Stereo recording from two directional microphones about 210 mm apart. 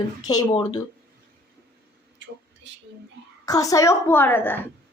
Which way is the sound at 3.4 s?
15° left (ahead or behind).